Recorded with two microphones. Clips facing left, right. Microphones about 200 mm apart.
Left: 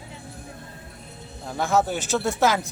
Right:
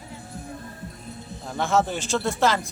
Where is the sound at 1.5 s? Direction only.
Centre (ahead or behind).